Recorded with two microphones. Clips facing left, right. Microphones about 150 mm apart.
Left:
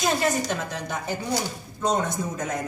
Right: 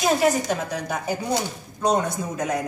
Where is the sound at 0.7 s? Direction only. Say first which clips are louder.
Right 3 dB; 10° right (ahead or behind).